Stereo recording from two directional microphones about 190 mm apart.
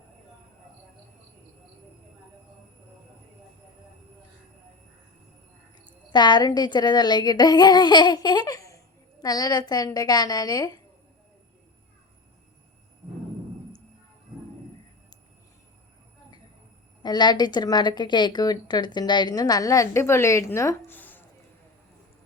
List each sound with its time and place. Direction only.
5.8 s a woman's voice: 25° left (ahead or behind)
17.0 s a woman's voice: 20° left (ahead or behind)